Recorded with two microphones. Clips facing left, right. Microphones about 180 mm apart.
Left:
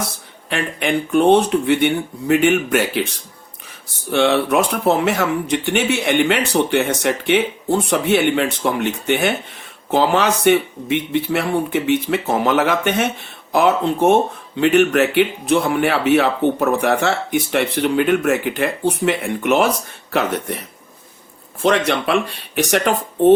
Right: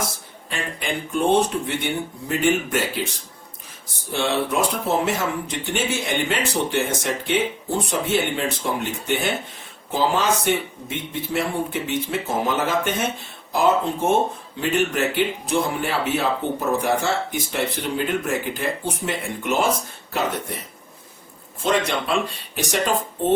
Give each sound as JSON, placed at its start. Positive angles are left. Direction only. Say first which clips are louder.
{"t": 0.5, "sound": "speech", "louder": "left 8 dB", "side_deg": 70}
{"t": 21.6, "sound": "speech", "louder": "left 5 dB", "side_deg": 70}